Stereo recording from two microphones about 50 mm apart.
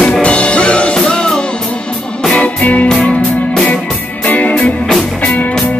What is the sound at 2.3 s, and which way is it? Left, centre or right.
Music, left.